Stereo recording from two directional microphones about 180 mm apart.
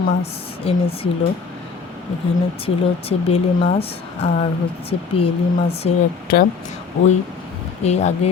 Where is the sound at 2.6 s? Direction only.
35° left (ahead or behind).